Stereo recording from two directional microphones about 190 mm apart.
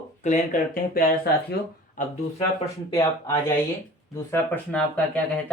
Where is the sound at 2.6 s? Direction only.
15° left (ahead or behind).